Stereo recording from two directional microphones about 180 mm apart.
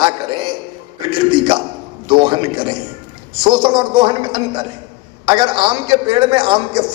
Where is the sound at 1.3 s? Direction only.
25° right (ahead or behind).